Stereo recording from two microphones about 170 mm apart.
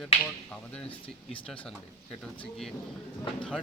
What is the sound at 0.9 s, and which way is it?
Speech, 30° left (ahead or behind).